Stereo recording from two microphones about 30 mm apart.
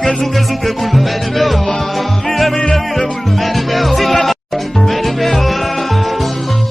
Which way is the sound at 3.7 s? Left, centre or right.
Centre.